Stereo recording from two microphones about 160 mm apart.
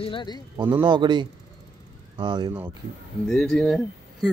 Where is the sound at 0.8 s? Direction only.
25° right (ahead or behind).